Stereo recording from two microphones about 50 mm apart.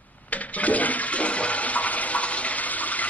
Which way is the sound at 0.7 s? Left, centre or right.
Left.